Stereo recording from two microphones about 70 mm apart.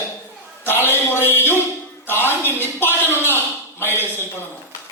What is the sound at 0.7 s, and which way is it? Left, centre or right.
Speech, left.